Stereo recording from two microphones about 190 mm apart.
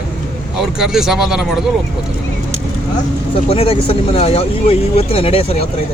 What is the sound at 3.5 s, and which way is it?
Speech, 30° left (ahead or behind).